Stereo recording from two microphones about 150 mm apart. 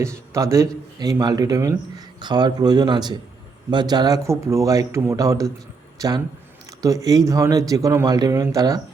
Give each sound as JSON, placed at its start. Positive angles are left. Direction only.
{"t": 0.0, "sound": "a man's voice", "side_deg": -20}